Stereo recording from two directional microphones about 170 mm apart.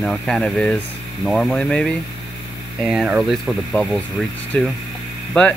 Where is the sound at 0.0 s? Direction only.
Centre (ahead or behind).